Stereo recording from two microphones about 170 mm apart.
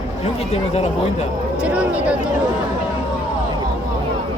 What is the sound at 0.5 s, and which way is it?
Speech, 40° left (ahead or behind).